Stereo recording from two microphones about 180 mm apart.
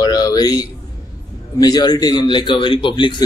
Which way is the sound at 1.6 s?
20° left (ahead or behind).